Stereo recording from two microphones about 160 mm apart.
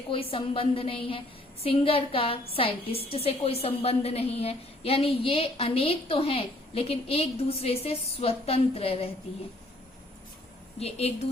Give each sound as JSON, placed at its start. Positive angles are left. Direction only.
{"t": 0.1, "sound": "a woman's voice", "side_deg": 35}
{"t": 10.8, "sound": "a woman's voice", "side_deg": 40}